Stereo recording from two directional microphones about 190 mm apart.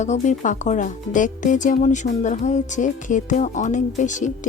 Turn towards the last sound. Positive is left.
turn(degrees=40)  # may be behind; listen again after turning